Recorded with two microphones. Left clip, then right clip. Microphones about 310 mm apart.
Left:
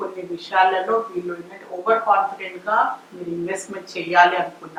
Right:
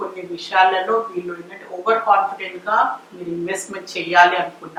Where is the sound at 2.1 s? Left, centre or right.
Centre.